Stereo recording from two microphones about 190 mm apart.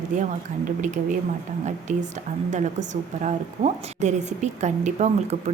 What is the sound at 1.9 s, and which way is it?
A woman's voice, 40° right (ahead or behind).